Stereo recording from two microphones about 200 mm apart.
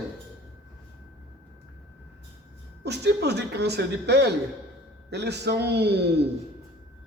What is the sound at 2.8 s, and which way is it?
Speech, 55° right (ahead or behind).